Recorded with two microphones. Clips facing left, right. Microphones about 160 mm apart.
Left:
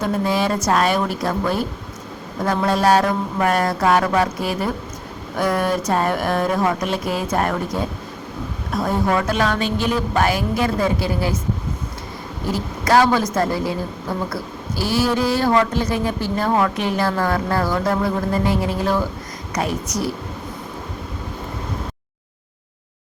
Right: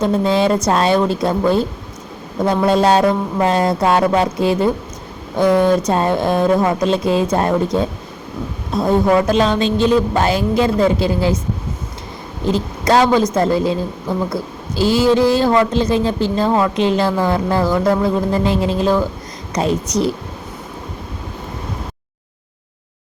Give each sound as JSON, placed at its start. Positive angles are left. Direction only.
{"t": 0.0, "sound": "a woman's voice", "side_deg": -25}
{"t": 12.5, "sound": "a woman's voice", "side_deg": -20}
{"t": 14.8, "sound": "a woman's voice", "side_deg": -20}